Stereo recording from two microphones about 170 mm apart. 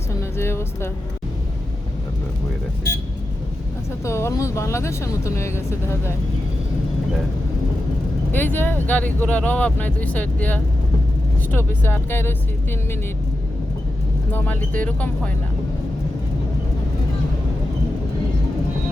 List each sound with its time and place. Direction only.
0.1 s music: 15° left (ahead or behind)
4.0 s speech: 15° left (ahead or behind)
8.3 s speech: 10° left (ahead or behind)
14.3 s speech: 10° left (ahead or behind)